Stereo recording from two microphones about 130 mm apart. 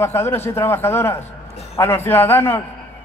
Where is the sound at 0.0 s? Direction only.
20° left (ahead or behind).